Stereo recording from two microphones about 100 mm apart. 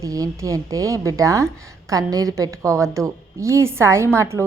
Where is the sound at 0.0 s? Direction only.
35° right (ahead or behind).